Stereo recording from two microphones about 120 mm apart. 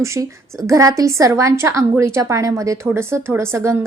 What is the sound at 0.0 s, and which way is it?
A woman's voice, 25° right (ahead or behind).